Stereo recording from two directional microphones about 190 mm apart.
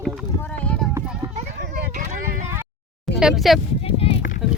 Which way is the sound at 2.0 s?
40° right (ahead or behind).